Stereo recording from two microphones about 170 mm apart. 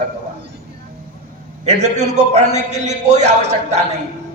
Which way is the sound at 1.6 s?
40° right (ahead or behind).